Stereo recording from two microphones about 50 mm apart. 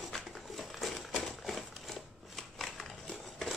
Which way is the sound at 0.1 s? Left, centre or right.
Centre.